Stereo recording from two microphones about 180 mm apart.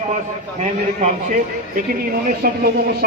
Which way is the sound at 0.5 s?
40° right (ahead or behind).